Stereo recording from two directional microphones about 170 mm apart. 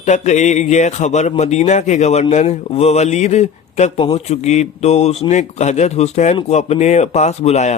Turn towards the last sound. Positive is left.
turn(degrees=40)  # may be behind; listen again after turning